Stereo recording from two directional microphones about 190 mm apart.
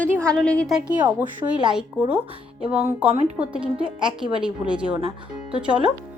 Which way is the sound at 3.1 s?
35° right (ahead or behind).